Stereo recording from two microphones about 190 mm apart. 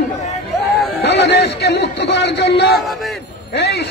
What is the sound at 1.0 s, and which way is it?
A man's voice, 60° left (ahead or behind).